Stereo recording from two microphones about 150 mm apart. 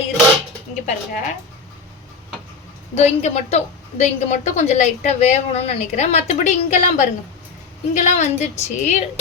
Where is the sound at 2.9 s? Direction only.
50° left (ahead or behind).